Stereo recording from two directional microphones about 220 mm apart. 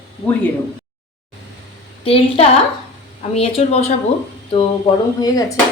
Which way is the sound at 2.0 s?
25° left (ahead or behind).